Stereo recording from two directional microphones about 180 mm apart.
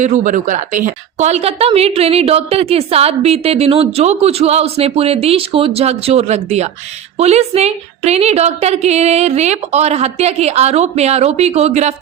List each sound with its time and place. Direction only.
0.0 s a woman's voice: 45° right (ahead or behind)